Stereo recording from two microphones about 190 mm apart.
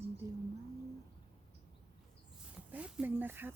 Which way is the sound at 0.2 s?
15° right (ahead or behind).